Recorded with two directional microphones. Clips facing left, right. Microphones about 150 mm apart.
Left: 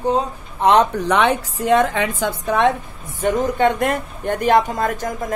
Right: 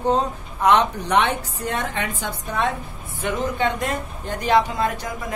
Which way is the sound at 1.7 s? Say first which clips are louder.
Left 11 dB; 90° left.